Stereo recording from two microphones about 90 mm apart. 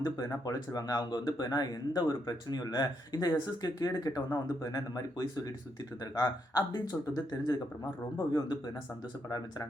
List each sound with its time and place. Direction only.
0.4 s speech: 45° left (ahead or behind)